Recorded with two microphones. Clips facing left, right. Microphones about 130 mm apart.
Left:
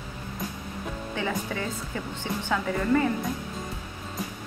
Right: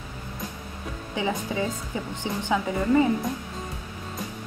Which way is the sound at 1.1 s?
15° right (ahead or behind).